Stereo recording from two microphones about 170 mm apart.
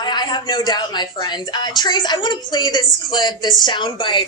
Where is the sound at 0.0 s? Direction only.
25° left (ahead or behind).